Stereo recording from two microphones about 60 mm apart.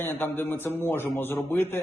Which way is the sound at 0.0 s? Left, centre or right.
Left.